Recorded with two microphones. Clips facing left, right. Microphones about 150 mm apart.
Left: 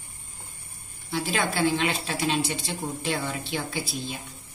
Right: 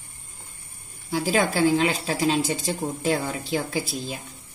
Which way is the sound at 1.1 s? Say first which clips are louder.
Right 5 dB; 40° right (ahead or behind).